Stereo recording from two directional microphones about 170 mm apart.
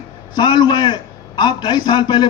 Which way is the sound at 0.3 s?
25° left (ahead or behind).